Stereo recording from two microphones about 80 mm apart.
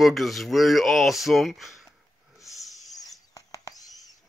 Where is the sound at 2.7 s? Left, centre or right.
Left.